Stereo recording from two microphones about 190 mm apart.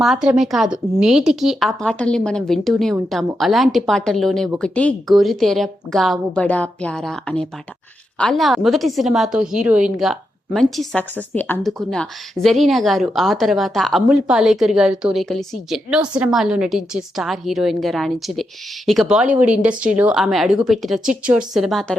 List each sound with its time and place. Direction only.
0.0 s a woman's voice: centre (ahead or behind)